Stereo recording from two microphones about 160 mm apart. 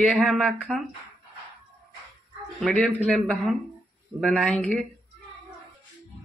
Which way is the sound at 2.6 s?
5° left (ahead or behind).